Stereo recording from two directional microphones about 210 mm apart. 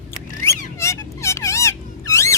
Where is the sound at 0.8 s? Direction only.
15° left (ahead or behind).